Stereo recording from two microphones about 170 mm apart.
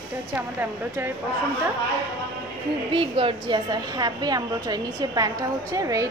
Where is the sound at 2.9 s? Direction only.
30° right (ahead or behind).